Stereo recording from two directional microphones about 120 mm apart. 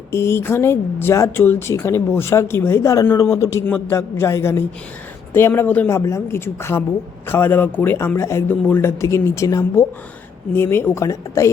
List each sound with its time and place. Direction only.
0.1 s speech: 20° left (ahead or behind)
6.0 s speech: 25° left (ahead or behind)